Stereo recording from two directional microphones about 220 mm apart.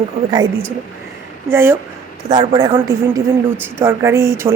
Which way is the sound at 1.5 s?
10° right (ahead or behind).